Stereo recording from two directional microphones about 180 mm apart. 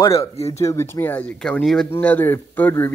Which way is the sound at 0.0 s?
30° left (ahead or behind).